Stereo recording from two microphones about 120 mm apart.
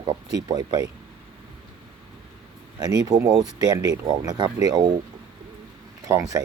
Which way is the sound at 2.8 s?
30° right (ahead or behind).